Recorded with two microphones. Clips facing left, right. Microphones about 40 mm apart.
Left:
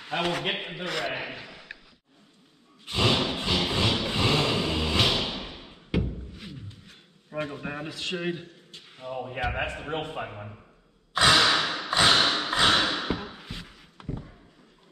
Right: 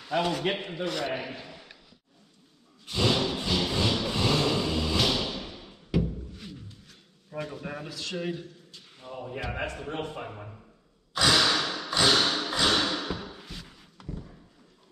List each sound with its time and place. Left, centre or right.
0.0 s a man's voice: left
0.8 s a man's voice: left
2.8 s a sound: left
6.3 s a man's voice: left
11.1 s thump: left